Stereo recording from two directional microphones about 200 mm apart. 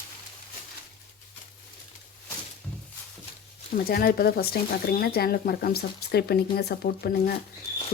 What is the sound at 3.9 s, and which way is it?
Speech, 50° left (ahead or behind).